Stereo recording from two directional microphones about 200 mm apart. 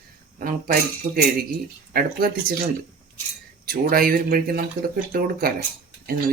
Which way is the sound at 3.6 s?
50° right (ahead or behind).